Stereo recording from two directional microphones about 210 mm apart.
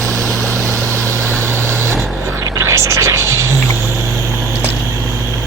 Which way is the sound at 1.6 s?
10° right (ahead or behind).